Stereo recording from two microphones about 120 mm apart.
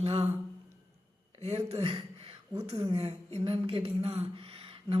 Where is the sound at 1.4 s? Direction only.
60° right (ahead or behind).